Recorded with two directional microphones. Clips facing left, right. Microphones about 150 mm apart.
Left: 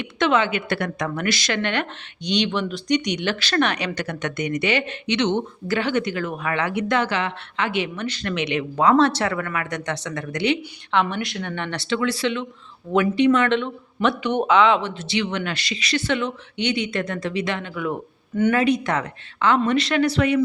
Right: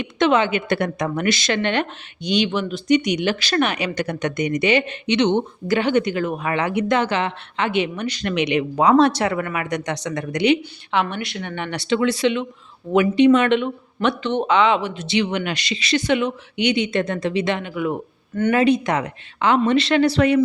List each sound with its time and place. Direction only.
0.0 s speech: 20° right (ahead or behind)
2.2 s speech: 5° right (ahead or behind)
10.9 s speech: centre (ahead or behind)
14.2 s speech: 10° left (ahead or behind); by 17.6 s 25° right (ahead or behind)
17.6 s speech: 10° right (ahead or behind)
18.5 s speech: 25° right (ahead or behind)
18.9 s speech: 15° right (ahead or behind)
19.7 s speech: 25° right (ahead or behind)